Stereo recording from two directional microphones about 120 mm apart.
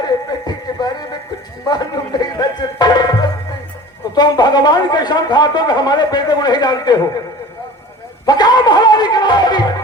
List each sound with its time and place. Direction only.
0.0 s a sound: 35° left (ahead or behind)
1.6 s speech: 35° left (ahead or behind)
8.3 s speech: 35° left (ahead or behind)